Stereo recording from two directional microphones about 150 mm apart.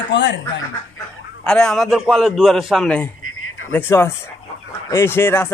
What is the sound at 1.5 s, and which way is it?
A man's voice, 5° left (ahead or behind).